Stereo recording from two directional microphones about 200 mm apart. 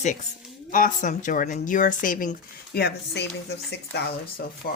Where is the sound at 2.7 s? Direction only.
55° left (ahead or behind).